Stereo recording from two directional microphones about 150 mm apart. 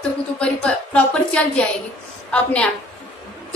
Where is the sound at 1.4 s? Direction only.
10° left (ahead or behind).